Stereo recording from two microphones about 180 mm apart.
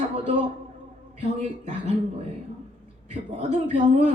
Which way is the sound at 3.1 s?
30° right (ahead or behind).